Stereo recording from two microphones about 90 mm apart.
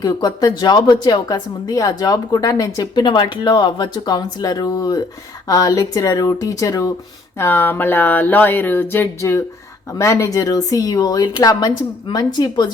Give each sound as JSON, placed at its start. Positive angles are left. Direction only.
{"t": 0.0, "sound": "a woman's voice", "side_deg": 50}
{"t": 2.9, "sound": "a woman's voice", "side_deg": 55}
{"t": 7.3, "sound": "a sound", "side_deg": 25}
{"t": 10.0, "sound": "a woman's voice", "side_deg": 35}